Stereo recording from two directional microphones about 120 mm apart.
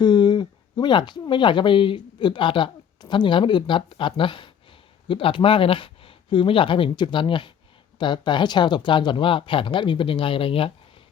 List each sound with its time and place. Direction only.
0.0 s speech: 40° left (ahead or behind)